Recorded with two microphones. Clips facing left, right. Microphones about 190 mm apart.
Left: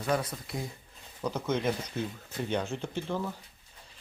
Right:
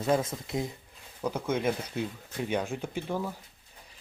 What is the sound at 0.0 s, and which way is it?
Speech, 25° right (ahead or behind).